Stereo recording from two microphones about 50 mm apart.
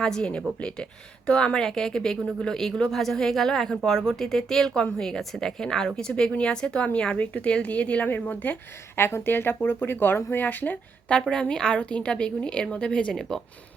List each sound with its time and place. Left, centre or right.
0.0 s a woman's voice: centre
1.6 s a woman's voice: centre; by 8.5 s left
9.0 s speech: left
11.1 s a woman's voice: centre
13.1 s a woman's voice: centre